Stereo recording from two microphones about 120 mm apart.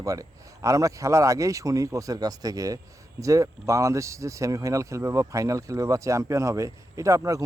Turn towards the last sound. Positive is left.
turn(degrees=-25)  # may be behind; listen again after turning